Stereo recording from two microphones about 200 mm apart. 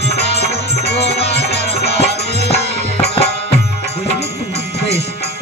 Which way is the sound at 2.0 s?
30° left (ahead or behind).